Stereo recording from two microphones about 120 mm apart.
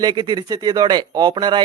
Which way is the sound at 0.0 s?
35° right (ahead or behind).